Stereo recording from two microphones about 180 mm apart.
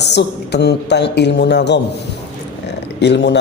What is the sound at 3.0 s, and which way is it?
Speech, 75° left (ahead or behind).